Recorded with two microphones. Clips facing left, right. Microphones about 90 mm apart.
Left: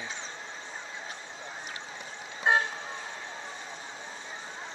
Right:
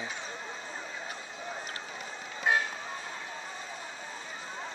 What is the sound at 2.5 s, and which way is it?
Vehicle, 25° left (ahead or behind).